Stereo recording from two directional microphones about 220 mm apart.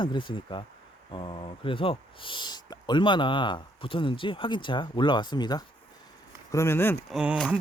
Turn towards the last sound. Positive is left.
turn(degrees=0)  # may be behind; listen again after turning